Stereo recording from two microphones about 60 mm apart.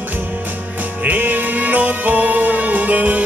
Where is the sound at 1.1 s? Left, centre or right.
Right.